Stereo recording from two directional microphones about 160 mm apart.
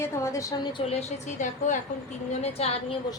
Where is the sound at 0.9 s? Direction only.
40° left (ahead or behind).